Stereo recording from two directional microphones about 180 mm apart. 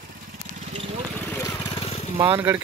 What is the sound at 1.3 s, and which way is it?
Vehicle, 20° left (ahead or behind).